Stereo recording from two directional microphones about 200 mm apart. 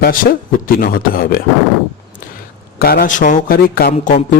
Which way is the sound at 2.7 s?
50° left (ahead or behind).